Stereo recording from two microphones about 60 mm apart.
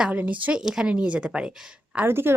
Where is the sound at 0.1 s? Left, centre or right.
Right.